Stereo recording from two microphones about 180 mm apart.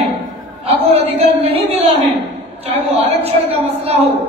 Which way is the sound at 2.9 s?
35° right (ahead or behind).